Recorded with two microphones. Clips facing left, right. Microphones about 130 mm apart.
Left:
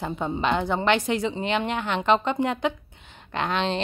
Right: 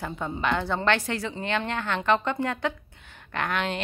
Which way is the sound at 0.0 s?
20° left (ahead or behind).